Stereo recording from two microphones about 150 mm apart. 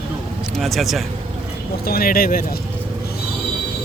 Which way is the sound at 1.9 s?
85° left.